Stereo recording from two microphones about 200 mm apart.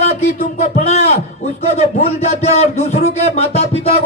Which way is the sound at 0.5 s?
35° left (ahead or behind).